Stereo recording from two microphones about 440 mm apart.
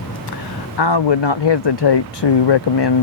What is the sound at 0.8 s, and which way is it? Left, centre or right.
Speech, left.